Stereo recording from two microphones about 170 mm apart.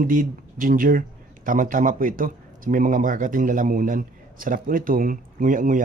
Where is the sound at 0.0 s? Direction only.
55° right (ahead or behind).